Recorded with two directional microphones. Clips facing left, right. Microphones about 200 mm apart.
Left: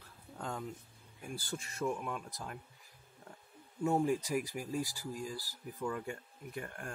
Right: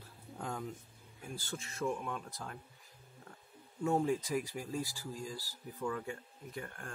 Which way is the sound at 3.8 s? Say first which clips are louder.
Left 1 dB; 5° left (ahead or behind).